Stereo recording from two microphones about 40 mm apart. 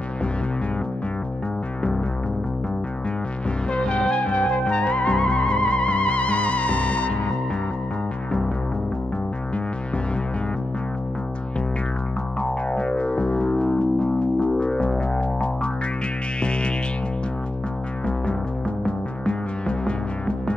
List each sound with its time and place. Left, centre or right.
1.8 s music: left
3.7 s music: left
12.4 s music: left
18.9 s music: left